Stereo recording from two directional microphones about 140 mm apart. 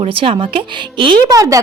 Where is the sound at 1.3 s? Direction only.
25° right (ahead or behind).